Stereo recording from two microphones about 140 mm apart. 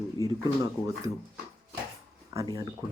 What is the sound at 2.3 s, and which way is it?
Speech, 30° right (ahead or behind).